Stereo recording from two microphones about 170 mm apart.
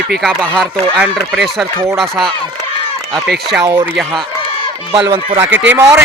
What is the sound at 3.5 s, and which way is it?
Speech, 10° right (ahead or behind).